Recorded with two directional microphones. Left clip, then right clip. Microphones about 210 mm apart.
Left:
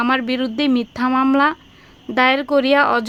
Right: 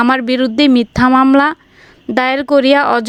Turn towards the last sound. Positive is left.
turn(degrees=-35)  # may be behind; listen again after turning